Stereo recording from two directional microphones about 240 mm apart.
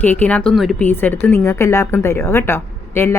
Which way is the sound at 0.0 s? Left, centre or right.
Centre.